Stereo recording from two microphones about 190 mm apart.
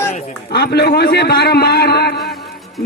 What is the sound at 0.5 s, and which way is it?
A man's voice, 55° left (ahead or behind).